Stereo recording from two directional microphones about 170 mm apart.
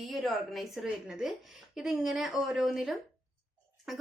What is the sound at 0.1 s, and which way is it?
Speech, centre (ahead or behind).